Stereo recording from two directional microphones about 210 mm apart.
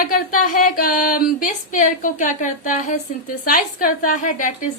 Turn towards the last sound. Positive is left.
turn(degrees=40)  # may be behind; listen again after turning